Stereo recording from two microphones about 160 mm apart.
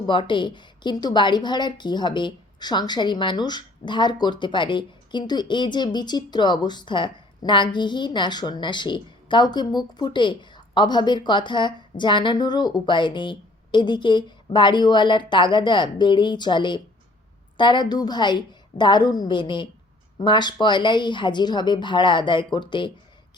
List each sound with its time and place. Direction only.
0.0 s a woman's voice: 30° left (ahead or behind)